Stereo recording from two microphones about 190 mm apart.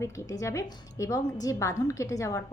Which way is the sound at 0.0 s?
15° left (ahead or behind).